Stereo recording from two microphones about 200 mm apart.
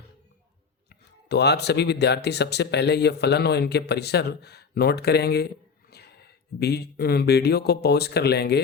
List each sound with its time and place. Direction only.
0.9 s speech: 55° left (ahead or behind)